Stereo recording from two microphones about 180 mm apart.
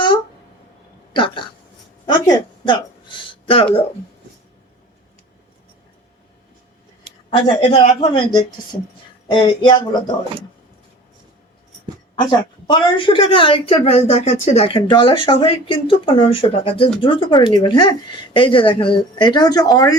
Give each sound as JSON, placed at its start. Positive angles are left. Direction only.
{"t": 1.1, "sound": "speech", "side_deg": 25}
{"t": 7.3, "sound": "speech", "side_deg": 30}
{"t": 12.2, "sound": "speech", "side_deg": 25}